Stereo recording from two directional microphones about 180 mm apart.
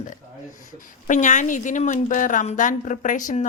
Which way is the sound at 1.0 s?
45° left (ahead or behind).